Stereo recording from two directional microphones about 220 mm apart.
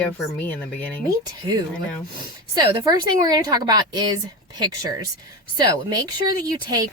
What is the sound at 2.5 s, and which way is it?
A woman's voice, 15° right (ahead or behind).